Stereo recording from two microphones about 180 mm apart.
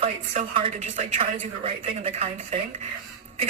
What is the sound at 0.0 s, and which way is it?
Speech, 30° right (ahead or behind).